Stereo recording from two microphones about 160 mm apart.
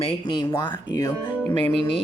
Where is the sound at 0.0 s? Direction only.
30° left (ahead or behind).